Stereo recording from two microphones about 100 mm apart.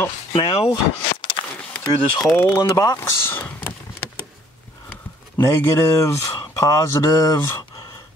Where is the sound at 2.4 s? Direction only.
25° left (ahead or behind).